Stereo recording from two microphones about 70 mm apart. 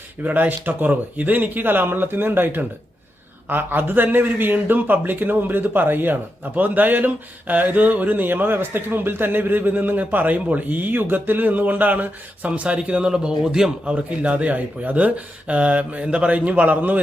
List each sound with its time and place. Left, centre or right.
0.3 s speech: right